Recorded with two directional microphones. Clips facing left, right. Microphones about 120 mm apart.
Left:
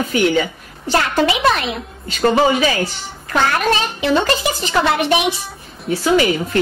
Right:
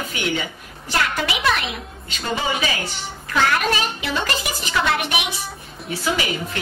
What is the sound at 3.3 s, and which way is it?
A child's voice, 35° left (ahead or behind).